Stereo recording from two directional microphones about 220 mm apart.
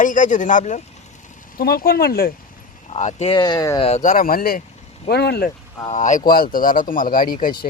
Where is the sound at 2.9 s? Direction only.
30° left (ahead or behind); by 5.5 s 45° left (ahead or behind).